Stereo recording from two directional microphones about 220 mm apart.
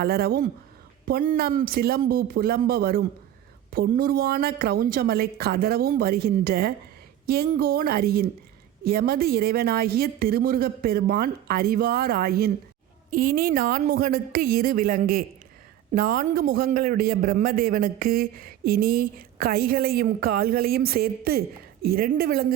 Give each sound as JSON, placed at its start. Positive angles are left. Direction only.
{"t": 0.0, "sound": "a man's voice", "side_deg": -45}